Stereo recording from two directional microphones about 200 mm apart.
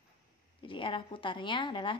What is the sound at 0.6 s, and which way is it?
Speech, 25° left (ahead or behind).